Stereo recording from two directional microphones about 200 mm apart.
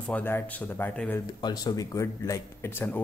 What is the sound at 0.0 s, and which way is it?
Speech, 10° left (ahead or behind).